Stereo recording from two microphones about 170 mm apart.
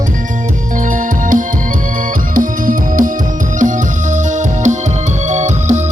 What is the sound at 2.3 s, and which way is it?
Music, 50° right (ahead or behind).